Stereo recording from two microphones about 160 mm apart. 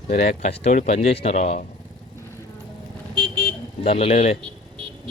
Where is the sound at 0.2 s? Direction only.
45° left (ahead or behind).